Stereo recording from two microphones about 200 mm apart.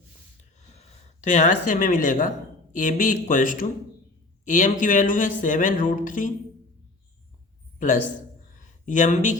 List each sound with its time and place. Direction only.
1.2 s speech: 40° left (ahead or behind)
7.8 s a man's voice: 40° left (ahead or behind)